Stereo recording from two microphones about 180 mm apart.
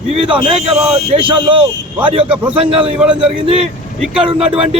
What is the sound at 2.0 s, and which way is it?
Speech, 30° right (ahead or behind).